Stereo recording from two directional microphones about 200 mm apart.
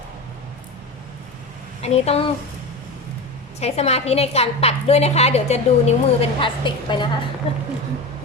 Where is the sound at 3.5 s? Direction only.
30° left (ahead or behind).